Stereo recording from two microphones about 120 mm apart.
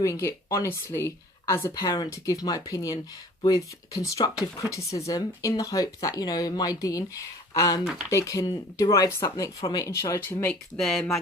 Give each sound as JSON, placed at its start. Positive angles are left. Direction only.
{"t": 0.0, "sound": "speech", "side_deg": 25}
{"t": 10.5, "sound": "speech", "side_deg": 5}